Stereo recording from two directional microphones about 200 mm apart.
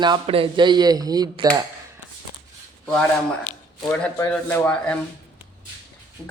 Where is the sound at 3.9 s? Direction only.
10° left (ahead or behind).